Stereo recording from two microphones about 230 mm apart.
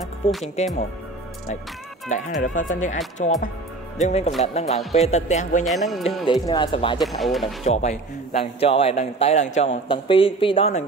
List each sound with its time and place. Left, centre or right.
0.0 s music: centre
2.0 s a man's voice: left
5.7 s speech: centre
6.0 s a man's voice: centre
7.0 s speech: centre
7.6 s a man's voice: left